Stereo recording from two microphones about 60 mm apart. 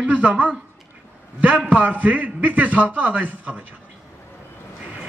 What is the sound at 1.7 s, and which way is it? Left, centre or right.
A man's voice, right.